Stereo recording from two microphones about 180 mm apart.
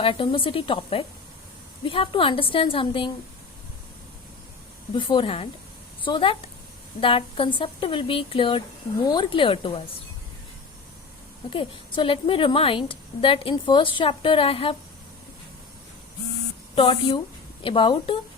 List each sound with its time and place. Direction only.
0.0 s a woman's voice: 30° left (ahead or behind)
4.9 s a woman's voice: 30° left (ahead or behind)
11.5 s a woman's voice: 30° left (ahead or behind)
16.7 s a woman's voice: 30° left (ahead or behind)